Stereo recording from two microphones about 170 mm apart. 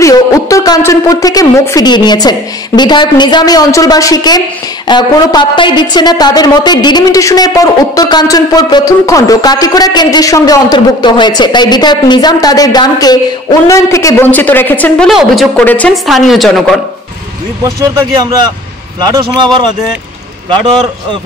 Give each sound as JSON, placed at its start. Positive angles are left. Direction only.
{"t": 0.0, "sound": "a woman's voice", "side_deg": 20}
{"t": 17.6, "sound": "speech", "side_deg": -20}